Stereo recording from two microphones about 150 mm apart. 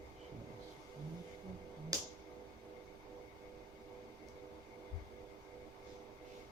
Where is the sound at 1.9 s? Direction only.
25° right (ahead or behind).